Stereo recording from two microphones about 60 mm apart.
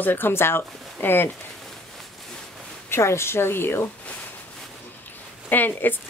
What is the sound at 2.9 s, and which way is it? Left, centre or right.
Speech, left.